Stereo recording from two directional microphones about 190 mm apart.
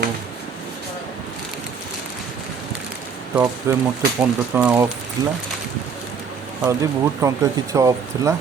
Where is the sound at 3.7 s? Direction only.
10° right (ahead or behind).